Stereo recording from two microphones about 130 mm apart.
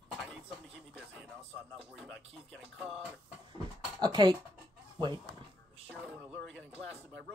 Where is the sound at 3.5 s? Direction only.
35° right (ahead or behind).